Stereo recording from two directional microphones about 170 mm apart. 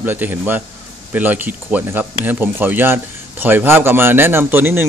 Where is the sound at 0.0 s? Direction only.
10° right (ahead or behind).